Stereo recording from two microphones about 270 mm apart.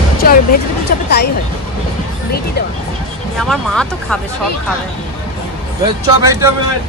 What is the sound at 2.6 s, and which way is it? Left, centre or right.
Speech, left.